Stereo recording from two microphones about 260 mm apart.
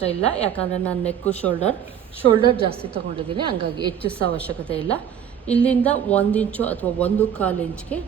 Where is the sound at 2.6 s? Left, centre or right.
Right.